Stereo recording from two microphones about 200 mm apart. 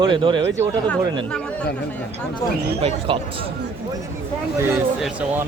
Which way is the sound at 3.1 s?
25° right (ahead or behind).